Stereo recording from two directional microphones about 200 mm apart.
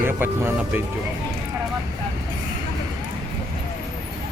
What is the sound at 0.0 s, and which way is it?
Speech, 10° right (ahead or behind).